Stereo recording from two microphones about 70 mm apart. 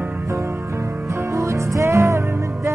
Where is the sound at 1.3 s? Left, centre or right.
Right.